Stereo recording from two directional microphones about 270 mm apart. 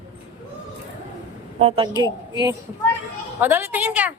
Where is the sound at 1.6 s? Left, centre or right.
Right.